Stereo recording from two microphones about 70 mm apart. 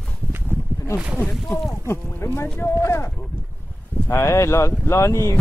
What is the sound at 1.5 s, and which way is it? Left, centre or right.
Speech, left.